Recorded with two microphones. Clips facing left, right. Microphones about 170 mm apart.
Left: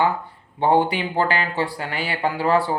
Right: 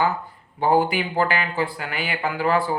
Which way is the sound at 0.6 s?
30° left (ahead or behind).